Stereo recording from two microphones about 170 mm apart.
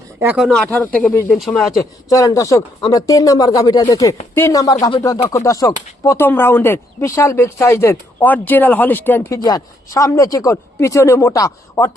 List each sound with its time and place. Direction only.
0.3 s speech: centre (ahead or behind)
2.0 s speech: 20° left (ahead or behind)